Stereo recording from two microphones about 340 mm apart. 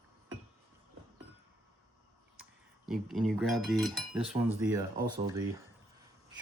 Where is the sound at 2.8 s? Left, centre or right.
Centre.